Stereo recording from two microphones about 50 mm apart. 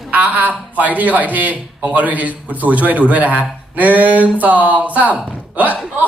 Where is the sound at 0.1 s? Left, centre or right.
Right.